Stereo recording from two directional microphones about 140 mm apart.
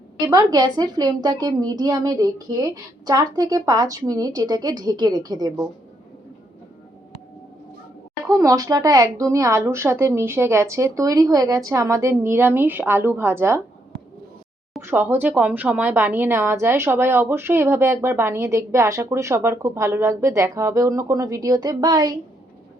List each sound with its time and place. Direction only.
0.3 s a woman's voice: 30° right (ahead or behind)
8.3 s a woman's voice: 25° right (ahead or behind)
14.8 s speech: 15° right (ahead or behind)